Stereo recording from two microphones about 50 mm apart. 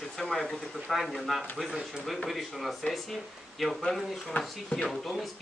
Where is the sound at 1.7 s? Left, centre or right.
Centre.